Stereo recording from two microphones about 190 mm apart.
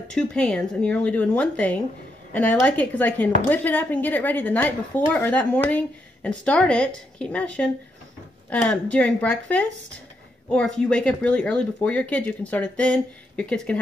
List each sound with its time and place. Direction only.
0.1 s speech: 5° left (ahead or behind)